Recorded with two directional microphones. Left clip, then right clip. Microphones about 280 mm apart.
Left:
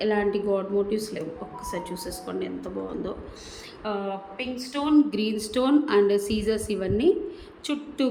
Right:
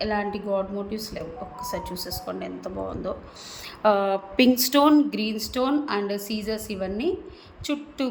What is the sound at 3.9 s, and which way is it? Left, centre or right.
Speech, centre.